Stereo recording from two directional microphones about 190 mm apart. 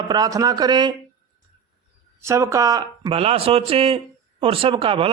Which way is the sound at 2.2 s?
15° right (ahead or behind).